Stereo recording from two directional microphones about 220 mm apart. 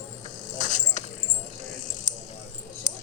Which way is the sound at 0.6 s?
35° left (ahead or behind).